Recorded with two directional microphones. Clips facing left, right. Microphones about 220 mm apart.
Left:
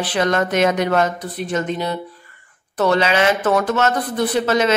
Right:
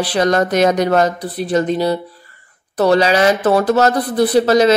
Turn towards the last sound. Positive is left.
turn(degrees=-35)  # may be behind; listen again after turning